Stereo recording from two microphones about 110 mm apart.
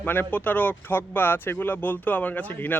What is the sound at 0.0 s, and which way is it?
Speech, 15° left (ahead or behind).